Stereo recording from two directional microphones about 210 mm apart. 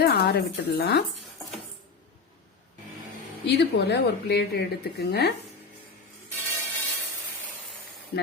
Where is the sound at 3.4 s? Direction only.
55° left (ahead or behind).